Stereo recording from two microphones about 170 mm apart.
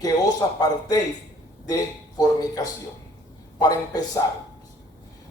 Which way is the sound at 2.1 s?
25° left (ahead or behind).